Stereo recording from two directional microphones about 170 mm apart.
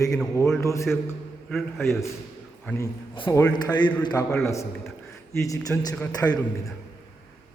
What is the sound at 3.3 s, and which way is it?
A man's voice, 20° left (ahead or behind).